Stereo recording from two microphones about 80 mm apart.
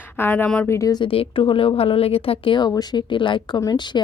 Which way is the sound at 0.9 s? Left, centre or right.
Left.